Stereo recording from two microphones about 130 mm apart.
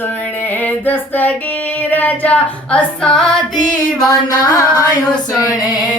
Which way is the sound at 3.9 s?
25° left (ahead or behind).